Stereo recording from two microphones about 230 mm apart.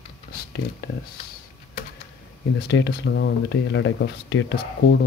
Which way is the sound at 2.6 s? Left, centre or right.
Left.